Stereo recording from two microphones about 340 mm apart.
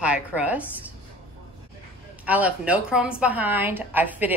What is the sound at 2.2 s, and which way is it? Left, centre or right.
Speech, centre.